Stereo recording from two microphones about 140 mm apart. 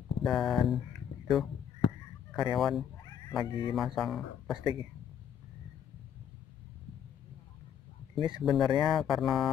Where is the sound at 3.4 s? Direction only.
35° left (ahead or behind).